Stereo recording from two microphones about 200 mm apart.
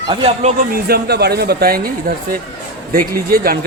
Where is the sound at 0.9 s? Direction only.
50° right (ahead or behind).